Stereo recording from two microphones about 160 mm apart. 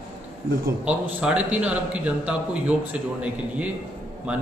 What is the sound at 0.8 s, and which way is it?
A man's voice, 10° right (ahead or behind).